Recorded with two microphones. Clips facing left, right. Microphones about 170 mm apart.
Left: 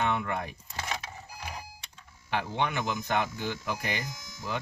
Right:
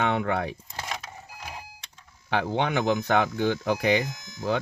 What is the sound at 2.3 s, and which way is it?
Speech, 70° right (ahead or behind).